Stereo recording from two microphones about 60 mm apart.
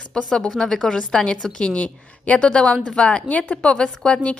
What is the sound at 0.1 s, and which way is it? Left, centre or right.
A woman's voice, centre.